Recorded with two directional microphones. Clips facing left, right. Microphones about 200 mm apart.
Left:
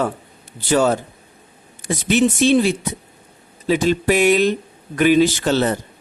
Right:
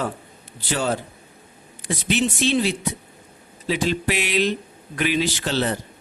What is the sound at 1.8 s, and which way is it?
Speech, 45° left (ahead or behind).